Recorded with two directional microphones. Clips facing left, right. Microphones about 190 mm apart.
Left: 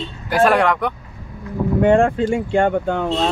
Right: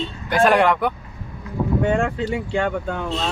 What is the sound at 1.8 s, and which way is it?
Speech, 60° left (ahead or behind).